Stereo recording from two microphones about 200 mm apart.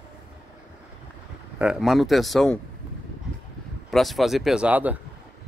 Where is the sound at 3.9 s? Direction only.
Centre (ahead or behind).